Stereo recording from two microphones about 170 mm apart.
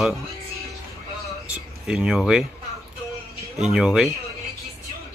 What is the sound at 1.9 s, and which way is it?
Speech, 5° right (ahead or behind).